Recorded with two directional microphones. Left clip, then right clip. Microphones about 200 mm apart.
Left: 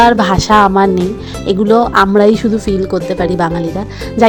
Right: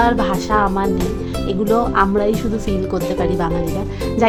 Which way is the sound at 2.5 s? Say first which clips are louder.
Left 6 dB; 25° left (ahead or behind).